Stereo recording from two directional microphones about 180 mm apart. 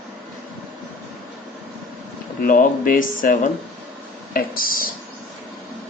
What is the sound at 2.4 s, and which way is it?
Speech, 50° left (ahead or behind).